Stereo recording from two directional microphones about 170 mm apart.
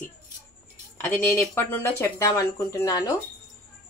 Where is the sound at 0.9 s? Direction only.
10° left (ahead or behind).